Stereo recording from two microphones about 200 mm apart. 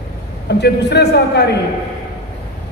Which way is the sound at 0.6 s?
60° left (ahead or behind).